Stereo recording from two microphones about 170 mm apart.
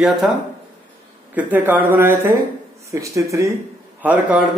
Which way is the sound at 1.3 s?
10° right (ahead or behind).